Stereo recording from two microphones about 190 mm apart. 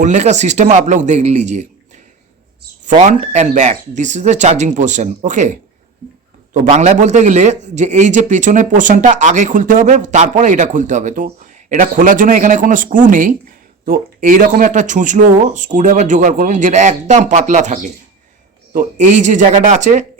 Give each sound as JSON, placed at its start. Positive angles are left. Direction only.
{"t": 0.0, "sound": "a man's voice", "side_deg": -40}
{"t": 2.8, "sound": "a man's voice", "side_deg": -40}